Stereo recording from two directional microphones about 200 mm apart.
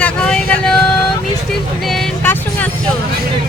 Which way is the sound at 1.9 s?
5° left (ahead or behind).